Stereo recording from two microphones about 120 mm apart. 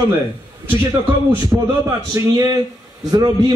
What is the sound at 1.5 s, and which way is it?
Speech, 20° right (ahead or behind).